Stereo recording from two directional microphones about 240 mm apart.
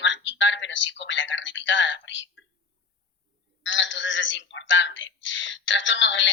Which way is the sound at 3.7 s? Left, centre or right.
Left.